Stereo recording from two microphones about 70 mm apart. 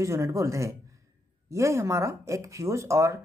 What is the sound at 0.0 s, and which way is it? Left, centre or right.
Speech, right.